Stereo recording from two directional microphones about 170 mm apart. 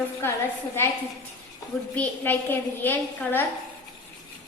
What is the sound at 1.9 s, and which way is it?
A woman's voice, 10° left (ahead or behind).